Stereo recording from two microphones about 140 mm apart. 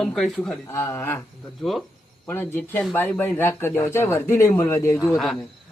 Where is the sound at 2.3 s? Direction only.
15° left (ahead or behind).